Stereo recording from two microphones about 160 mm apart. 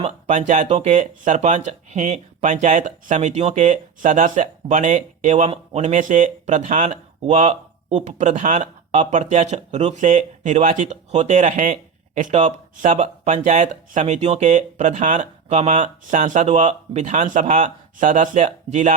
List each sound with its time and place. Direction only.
0.0 s speech: 45° right (ahead or behind)